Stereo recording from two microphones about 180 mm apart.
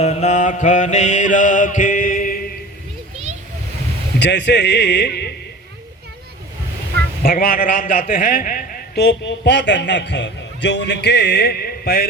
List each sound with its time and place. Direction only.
0.0 s mantra: 40° left (ahead or behind)
4.2 s speech: 75° left (ahead or behind)
7.2 s a man's voice: 55° left (ahead or behind)